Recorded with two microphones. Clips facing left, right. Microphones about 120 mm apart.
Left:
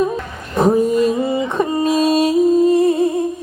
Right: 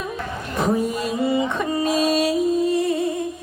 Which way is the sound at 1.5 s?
35° left (ahead or behind).